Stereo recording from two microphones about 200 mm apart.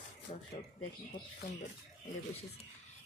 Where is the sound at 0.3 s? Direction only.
30° left (ahead or behind).